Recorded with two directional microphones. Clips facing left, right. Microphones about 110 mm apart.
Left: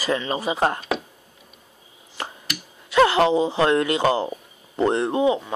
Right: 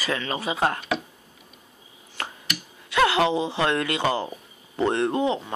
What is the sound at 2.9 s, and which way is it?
Speech, 35° left (ahead or behind).